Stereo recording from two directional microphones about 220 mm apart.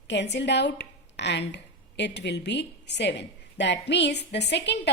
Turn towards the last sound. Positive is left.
turn(degrees=50)  # may be behind; listen again after turning